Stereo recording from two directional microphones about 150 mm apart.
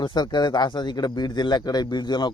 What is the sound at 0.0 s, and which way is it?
Speech, 30° left (ahead or behind).